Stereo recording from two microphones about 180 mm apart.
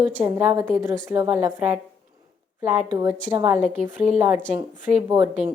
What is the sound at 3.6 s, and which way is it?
Speech, 40° right (ahead or behind).